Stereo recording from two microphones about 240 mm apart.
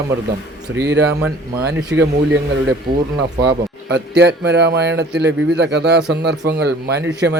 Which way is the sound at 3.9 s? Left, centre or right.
Right.